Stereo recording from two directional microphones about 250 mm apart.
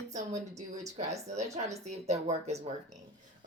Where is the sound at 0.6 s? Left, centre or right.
Right.